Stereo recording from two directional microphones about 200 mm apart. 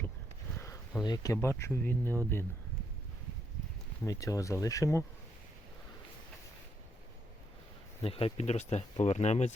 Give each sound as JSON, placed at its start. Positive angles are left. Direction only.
{"t": 0.5, "sound": "a sound", "side_deg": 15}
{"t": 1.0, "sound": "speech", "side_deg": 20}
{"t": 4.0, "sound": "speech", "side_deg": 15}
{"t": 8.0, "sound": "speech", "side_deg": 30}